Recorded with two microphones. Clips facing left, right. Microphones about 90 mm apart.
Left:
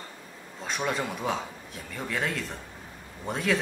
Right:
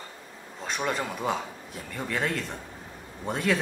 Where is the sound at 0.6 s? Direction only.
Centre (ahead or behind).